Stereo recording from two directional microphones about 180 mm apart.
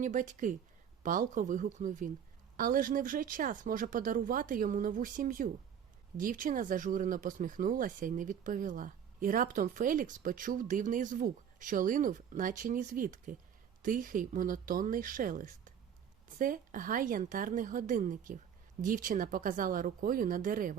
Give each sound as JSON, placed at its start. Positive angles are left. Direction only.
{"t": 0.0, "sound": "speech", "side_deg": -45}